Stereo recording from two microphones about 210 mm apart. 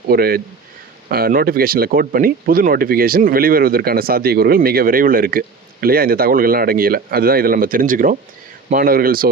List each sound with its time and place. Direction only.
0.1 s speech: 45° right (ahead or behind)